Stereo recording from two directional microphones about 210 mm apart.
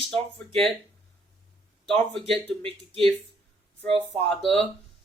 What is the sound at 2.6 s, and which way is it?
Speech, 25° right (ahead or behind).